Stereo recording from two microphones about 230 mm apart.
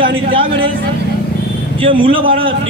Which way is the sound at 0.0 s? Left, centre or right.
Right.